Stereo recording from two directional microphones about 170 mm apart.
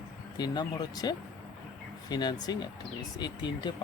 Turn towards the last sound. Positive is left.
turn(degrees=25)  # may be behind; listen again after turning